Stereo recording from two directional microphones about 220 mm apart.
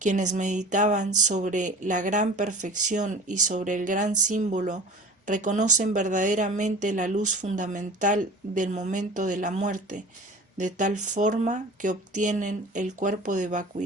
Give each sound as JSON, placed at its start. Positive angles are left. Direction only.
{"t": 0.0, "sound": "speech", "side_deg": -35}